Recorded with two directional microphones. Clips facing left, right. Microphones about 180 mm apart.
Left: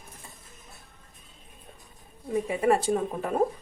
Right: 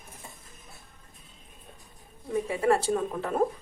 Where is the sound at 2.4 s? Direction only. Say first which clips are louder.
Left 1 dB; 15° left (ahead or behind).